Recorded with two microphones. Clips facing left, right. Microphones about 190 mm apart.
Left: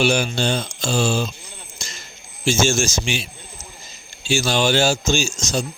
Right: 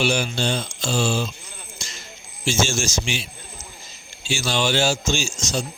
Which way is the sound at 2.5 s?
50° left (ahead or behind).